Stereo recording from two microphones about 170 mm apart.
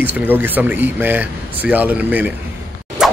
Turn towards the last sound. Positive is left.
turn(degrees=-5)  # may be behind; listen again after turning